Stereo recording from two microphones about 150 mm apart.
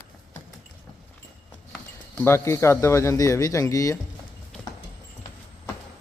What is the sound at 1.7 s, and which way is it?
Speech, 10° left (ahead or behind).